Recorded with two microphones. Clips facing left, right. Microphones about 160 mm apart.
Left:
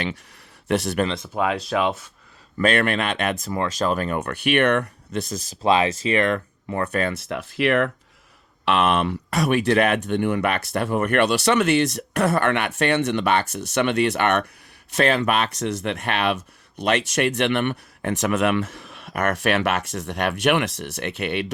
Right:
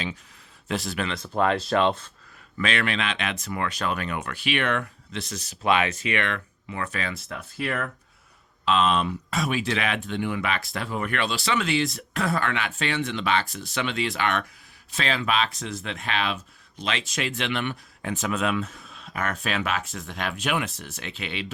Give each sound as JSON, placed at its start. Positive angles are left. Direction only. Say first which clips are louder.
{"t": 0.7, "sound": "speech", "louder": "left 7 dB", "side_deg": 65}
{"t": 1.3, "sound": "speech", "louder": "even", "side_deg": 5}
{"t": 2.6, "sound": "speech", "louder": "left 6 dB", "side_deg": 50}
{"t": 4.3, "sound": "speech", "louder": "left 7 dB", "side_deg": 55}
{"t": 5.6, "sound": "speech", "louder": "left 4 dB", "side_deg": 35}
{"t": 7.3, "sound": "speech", "louder": "left 9 dB", "side_deg": 85}
{"t": 8.6, "sound": "speech", "louder": "left 3 dB", "side_deg": 65}